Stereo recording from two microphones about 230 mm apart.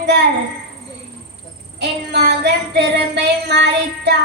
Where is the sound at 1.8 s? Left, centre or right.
Right.